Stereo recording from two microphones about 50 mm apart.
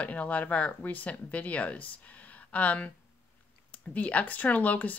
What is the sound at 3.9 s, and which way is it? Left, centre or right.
Speech, left.